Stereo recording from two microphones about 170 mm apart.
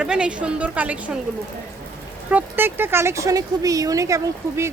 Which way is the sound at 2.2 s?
10° right (ahead or behind).